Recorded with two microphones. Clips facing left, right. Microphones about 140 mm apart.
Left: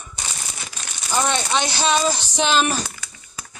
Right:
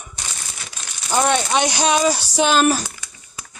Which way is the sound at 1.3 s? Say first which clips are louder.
Right 4 dB; 10° right (ahead or behind).